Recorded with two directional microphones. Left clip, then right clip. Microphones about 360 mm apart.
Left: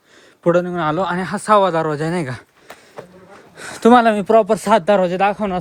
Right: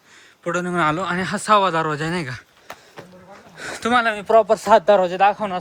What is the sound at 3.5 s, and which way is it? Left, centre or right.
Speech, centre.